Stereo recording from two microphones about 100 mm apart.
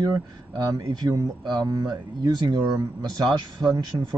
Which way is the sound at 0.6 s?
40° right (ahead or behind).